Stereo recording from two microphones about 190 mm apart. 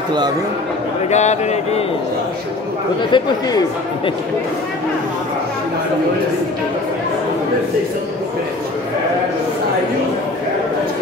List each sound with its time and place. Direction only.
1.1 s speech: 35° left (ahead or behind)
3.1 s speech: 20° left (ahead or behind)